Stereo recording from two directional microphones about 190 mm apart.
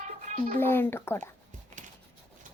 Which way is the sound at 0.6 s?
10° left (ahead or behind).